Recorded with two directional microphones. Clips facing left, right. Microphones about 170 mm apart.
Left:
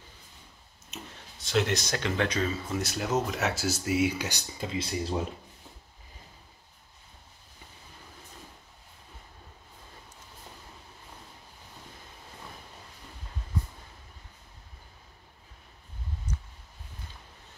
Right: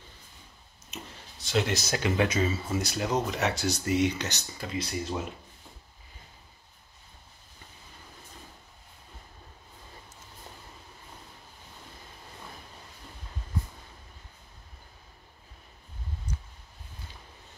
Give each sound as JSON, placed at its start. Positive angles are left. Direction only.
{"t": 0.8, "sound": "speech", "side_deg": 0}
{"t": 4.7, "sound": "speech", "side_deg": 25}